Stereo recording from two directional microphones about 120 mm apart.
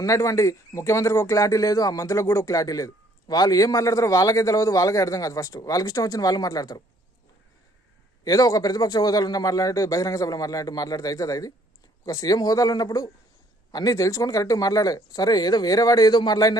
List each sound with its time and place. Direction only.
0.0 s speech: 25° left (ahead or behind)
8.2 s a man's voice: 30° left (ahead or behind)